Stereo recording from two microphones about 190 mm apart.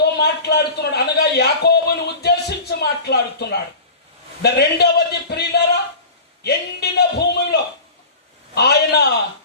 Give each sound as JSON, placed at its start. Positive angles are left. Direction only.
{"t": 0.0, "sound": "a man's voice", "side_deg": 60}